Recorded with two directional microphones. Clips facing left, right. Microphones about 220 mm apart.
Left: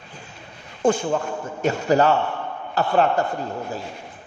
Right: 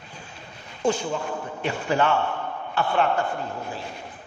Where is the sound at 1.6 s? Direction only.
40° left (ahead or behind).